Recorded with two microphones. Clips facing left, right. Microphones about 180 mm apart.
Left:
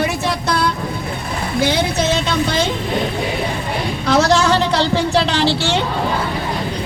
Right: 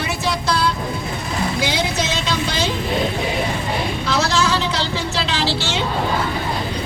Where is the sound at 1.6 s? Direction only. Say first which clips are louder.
Left 9 dB; 55° left (ahead or behind).